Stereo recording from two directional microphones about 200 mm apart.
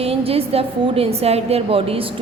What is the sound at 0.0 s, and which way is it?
A woman's voice, 30° right (ahead or behind).